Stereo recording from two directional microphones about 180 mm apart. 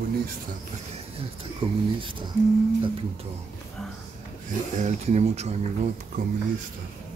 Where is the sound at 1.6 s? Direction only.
30° right (ahead or behind).